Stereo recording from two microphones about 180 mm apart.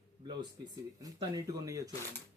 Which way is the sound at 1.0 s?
20° right (ahead or behind).